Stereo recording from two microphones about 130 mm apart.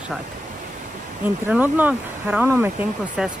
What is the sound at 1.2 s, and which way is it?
Speech, 15° right (ahead or behind).